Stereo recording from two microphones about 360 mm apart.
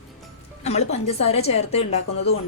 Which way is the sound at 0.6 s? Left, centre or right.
Centre.